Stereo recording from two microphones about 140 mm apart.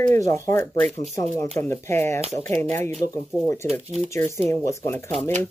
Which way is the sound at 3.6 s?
Centre (ahead or behind).